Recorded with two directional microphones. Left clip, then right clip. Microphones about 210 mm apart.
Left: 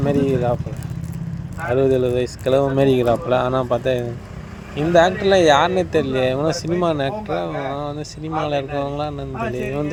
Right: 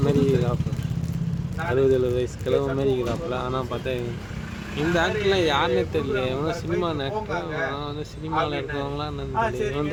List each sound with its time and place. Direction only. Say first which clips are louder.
0.0 s speech: left 3 dB; 15° left (ahead or behind)
1.7 s speech: left 4 dB; 20° left (ahead or behind)